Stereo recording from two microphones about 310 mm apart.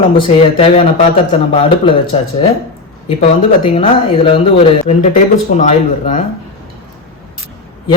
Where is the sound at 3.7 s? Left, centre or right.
Centre.